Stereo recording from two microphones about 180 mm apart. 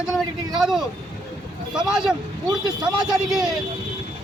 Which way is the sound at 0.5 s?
Centre (ahead or behind).